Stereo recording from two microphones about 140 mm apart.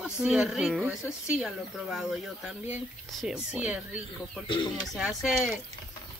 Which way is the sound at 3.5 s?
10° right (ahead or behind).